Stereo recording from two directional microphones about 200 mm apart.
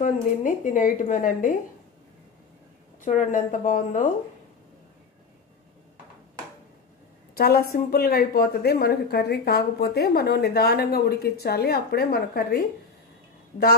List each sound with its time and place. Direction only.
0.0 s a woman's voice: 40° left (ahead or behind)
3.0 s a woman's voice: 40° left (ahead or behind)
7.3 s a woman's voice: 50° left (ahead or behind)